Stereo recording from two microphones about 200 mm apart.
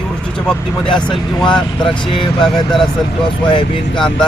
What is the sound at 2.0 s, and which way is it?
Speech, 25° left (ahead or behind).